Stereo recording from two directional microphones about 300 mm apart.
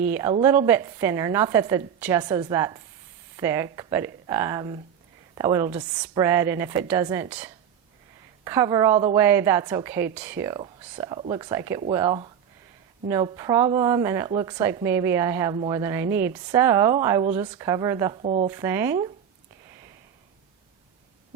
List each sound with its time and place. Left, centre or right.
0.1 s a woman's voice: centre